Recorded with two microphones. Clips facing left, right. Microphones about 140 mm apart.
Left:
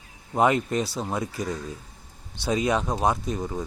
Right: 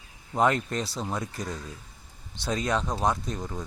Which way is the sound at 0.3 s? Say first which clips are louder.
Left 3 dB; 5° left (ahead or behind).